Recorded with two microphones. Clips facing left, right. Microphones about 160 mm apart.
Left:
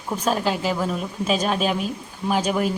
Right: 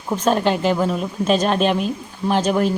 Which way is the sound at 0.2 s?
5° left (ahead or behind).